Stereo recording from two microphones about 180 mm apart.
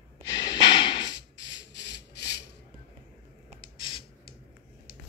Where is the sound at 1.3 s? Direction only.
80° left.